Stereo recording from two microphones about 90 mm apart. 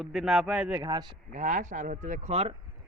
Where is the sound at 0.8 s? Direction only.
50° right (ahead or behind).